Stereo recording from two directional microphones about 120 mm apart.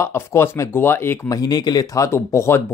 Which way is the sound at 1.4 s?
35° left (ahead or behind).